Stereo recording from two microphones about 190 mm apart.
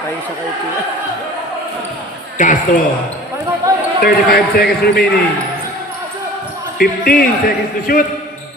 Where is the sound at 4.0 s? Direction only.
55° left (ahead or behind).